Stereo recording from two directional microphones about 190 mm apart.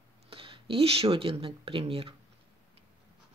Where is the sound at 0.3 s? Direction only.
30° right (ahead or behind).